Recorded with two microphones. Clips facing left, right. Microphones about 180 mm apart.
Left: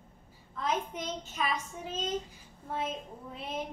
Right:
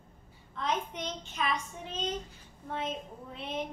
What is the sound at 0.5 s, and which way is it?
A woman's voice, 5° left (ahead or behind).